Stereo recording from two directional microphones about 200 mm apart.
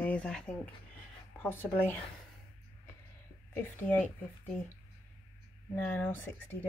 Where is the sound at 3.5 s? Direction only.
10° left (ahead or behind).